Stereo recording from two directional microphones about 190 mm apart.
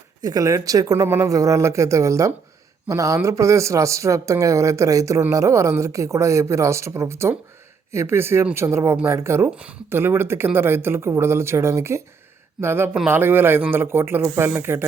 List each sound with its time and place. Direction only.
0.2 s speech: 20° right (ahead or behind)